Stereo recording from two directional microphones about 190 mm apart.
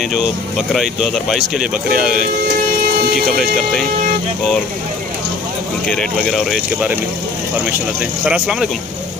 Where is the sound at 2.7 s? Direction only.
50° right (ahead or behind).